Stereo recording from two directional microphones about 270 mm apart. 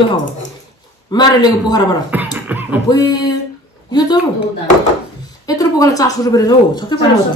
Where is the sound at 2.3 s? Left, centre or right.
Centre.